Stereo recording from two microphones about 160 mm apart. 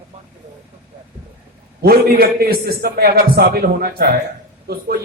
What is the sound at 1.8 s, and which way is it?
A man's voice, 70° right (ahead or behind).